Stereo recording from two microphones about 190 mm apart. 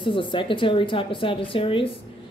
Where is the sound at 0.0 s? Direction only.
25° left (ahead or behind).